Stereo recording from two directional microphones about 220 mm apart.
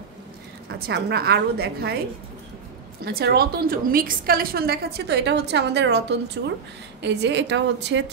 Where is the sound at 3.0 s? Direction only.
45° right (ahead or behind).